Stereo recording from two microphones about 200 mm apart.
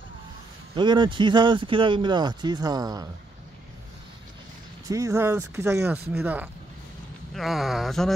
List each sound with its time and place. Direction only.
0.7 s speech: 25° right (ahead or behind)
4.8 s speech: 15° right (ahead or behind); by 8.1 s centre (ahead or behind)